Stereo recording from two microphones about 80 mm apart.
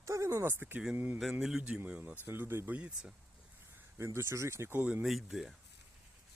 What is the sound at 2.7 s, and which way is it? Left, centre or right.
Speech, centre.